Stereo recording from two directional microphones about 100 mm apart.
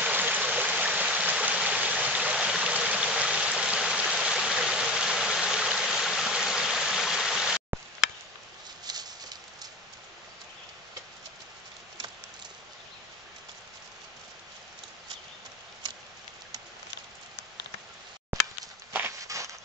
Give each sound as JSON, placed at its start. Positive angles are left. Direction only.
{"t": 0.0, "sound": "stream", "side_deg": -15}
{"t": 8.8, "sound": "a sound", "side_deg": -40}
{"t": 19.2, "sound": "walk", "side_deg": -30}